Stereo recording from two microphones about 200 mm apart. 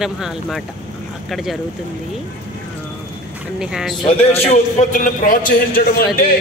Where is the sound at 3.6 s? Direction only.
5° right (ahead or behind).